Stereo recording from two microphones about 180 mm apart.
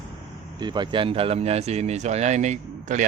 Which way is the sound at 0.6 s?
25° right (ahead or behind).